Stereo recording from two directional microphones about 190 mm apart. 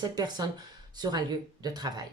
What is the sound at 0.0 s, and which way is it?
Speech, 20° right (ahead or behind).